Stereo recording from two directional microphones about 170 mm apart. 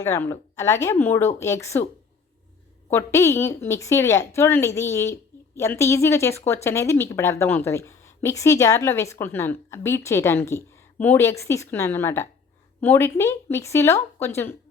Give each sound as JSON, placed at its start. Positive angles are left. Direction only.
{"t": 0.0, "sound": "a woman's voice", "side_deg": 15}
{"t": 2.9, "sound": "a woman's voice", "side_deg": 15}